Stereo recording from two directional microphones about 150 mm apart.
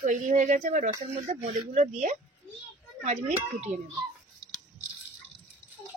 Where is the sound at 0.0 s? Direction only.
55° right (ahead or behind).